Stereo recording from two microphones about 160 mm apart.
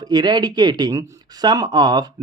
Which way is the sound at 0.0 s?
25° right (ahead or behind).